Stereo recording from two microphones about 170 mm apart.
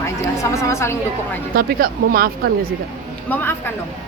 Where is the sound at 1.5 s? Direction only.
60° right (ahead or behind).